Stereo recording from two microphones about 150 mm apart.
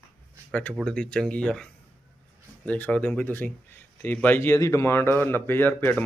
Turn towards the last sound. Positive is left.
turn(degrees=10)  # may be behind; listen again after turning